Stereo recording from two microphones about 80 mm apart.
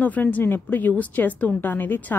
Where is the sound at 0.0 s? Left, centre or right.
Centre.